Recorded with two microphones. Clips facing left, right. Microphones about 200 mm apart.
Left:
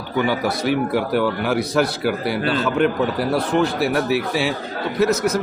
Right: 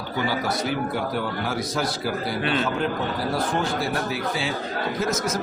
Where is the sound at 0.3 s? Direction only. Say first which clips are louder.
Left 4 dB; 65° left (ahead or behind).